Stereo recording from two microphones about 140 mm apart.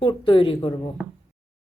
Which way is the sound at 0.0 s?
40° left (ahead or behind).